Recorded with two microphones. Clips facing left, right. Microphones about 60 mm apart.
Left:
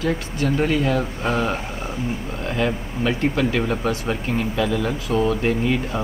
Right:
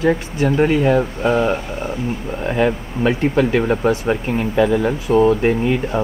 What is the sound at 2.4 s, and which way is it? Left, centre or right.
Speech, right.